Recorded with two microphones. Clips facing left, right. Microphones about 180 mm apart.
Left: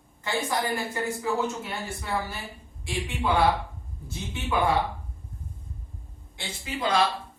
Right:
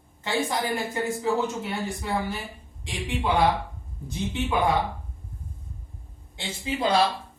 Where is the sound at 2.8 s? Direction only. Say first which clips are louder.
Even; 20° right (ahead or behind).